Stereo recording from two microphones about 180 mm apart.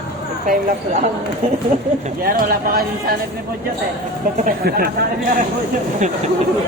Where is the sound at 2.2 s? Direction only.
50° right (ahead or behind).